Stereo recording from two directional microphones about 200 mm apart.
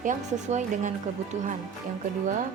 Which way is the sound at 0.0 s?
40° right (ahead or behind).